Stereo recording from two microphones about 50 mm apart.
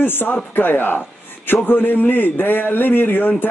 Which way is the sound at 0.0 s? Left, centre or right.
Left.